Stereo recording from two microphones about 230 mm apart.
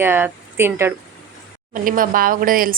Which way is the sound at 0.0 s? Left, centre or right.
Centre.